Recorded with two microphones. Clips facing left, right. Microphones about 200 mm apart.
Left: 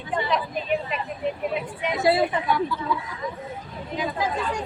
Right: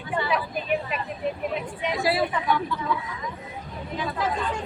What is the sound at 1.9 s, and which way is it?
Speech, 20° left (ahead or behind).